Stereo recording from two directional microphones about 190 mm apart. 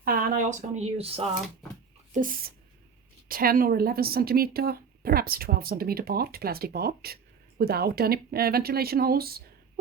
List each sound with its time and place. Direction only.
0.0 s speech: 50° right (ahead or behind); by 1.2 s 30° right (ahead or behind)
2.1 s a woman's voice: 45° right (ahead or behind)